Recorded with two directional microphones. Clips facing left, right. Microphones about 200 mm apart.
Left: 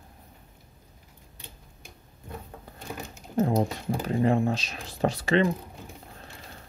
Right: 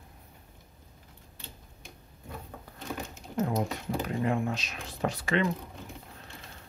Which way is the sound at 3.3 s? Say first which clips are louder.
Left 5 dB; 30° left (ahead or behind).